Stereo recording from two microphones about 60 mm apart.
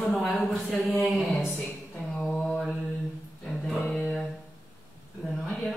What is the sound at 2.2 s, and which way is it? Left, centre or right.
Mantra, centre.